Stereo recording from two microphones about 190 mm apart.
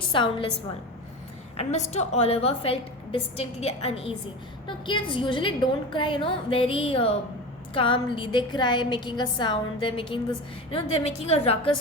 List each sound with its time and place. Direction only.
0.1 s a woman's voice: 25° left (ahead or behind)
1.5 s a woman's voice: 35° left (ahead or behind)